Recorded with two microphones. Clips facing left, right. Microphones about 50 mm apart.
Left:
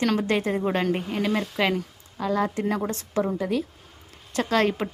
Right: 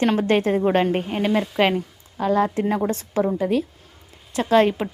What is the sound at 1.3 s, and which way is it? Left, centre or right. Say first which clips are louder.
Speech: right 6 dB; right.